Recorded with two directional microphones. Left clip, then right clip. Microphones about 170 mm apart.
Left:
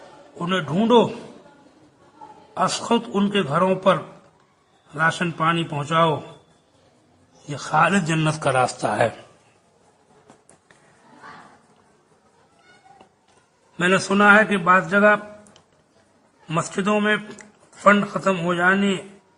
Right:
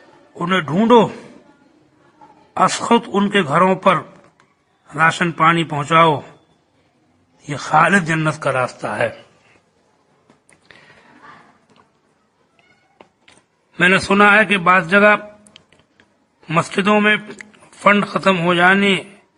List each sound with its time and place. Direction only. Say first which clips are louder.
0.3 s a man's voice: right 5 dB; 15° right (ahead or behind)
2.6 s a man's voice: right 6 dB; 20° right (ahead or behind)
7.4 s a man's voice: right 5 dB; 15° right (ahead or behind); by 9.1 s 10° left (ahead or behind)
13.7 s a man's voice: right 6 dB; 15° right (ahead or behind)
16.5 s a man's voice: right 6 dB; 15° right (ahead or behind)